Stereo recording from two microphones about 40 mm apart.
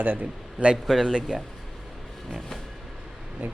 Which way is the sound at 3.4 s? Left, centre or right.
Right.